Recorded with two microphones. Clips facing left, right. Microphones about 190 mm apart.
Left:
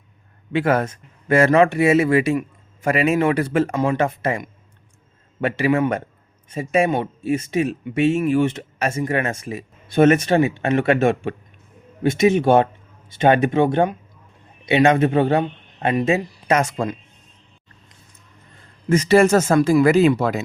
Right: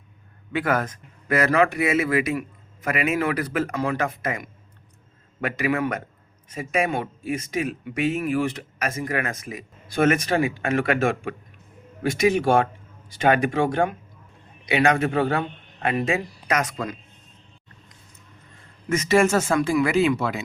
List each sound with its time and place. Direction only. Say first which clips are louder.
0.5 s a man's voice: left 5 dB; 25° left (ahead or behind)
18.9 s speech: left 5 dB; 35° left (ahead or behind)